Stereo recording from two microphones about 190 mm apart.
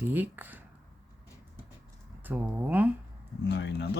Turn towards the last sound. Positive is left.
turn(degrees=65)  # may be behind; listen again after turning